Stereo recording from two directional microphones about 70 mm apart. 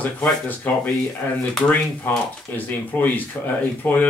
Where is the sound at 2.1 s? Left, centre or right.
Left.